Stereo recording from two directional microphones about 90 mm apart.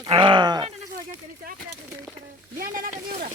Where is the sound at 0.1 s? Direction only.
65° right (ahead or behind).